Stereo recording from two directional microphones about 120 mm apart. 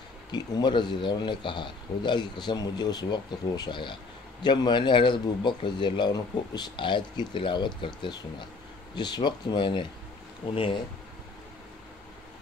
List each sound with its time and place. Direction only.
0.3 s a man's voice: 40° left (ahead or behind)